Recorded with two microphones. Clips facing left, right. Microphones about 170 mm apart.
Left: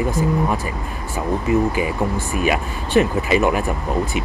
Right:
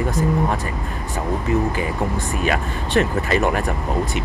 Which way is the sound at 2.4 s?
10° left (ahead or behind).